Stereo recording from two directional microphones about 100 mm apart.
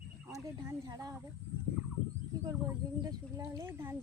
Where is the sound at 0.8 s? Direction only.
40° right (ahead or behind).